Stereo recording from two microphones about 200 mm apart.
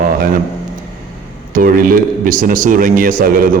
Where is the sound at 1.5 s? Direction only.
45° right (ahead or behind).